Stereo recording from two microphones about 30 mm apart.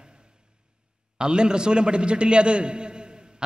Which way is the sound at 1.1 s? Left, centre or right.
Right.